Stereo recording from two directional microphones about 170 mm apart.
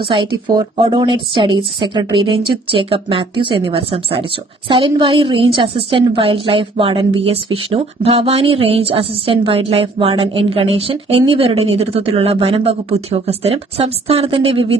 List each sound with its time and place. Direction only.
0.1 s a woman's voice: 30° right (ahead or behind)